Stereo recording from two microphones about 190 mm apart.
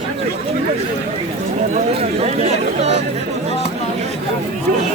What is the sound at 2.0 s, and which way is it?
Speech, 35° right (ahead or behind).